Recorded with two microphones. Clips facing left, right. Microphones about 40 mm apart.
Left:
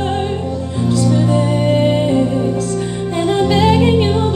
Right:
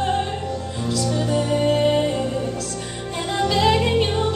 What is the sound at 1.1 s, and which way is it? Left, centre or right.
Music, centre.